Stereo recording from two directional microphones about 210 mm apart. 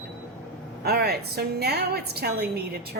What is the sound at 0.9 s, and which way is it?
A woman's voice, 50° right (ahead or behind).